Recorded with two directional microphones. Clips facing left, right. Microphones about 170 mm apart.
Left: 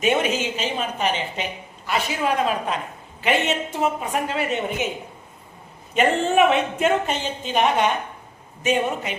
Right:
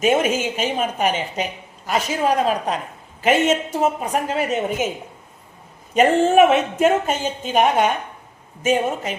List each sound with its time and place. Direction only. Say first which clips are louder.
0.0 s a woman's voice: right 3 dB; 45° right (ahead or behind)
5.9 s a woman's voice: right 5 dB; 45° right (ahead or behind)